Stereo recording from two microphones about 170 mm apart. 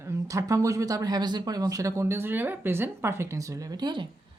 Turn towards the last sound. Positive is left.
turn(degrees=-25)  # may be behind; listen again after turning